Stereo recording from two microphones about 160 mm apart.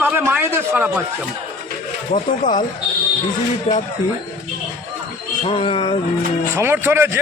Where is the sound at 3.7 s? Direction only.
45° left (ahead or behind).